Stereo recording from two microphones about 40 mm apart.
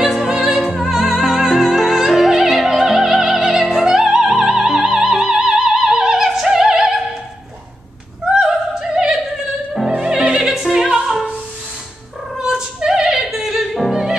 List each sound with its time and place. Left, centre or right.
0.0 s music: centre
8.4 s opera: centre
9.8 s music: centre
10.5 s opera: centre
12.4 s music: centre